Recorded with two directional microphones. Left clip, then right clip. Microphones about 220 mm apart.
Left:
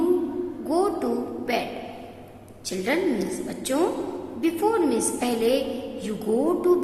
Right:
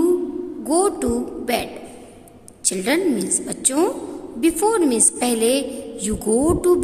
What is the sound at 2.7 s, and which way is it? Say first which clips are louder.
A woman's voice: right 4 dB; 50° right (ahead or behind).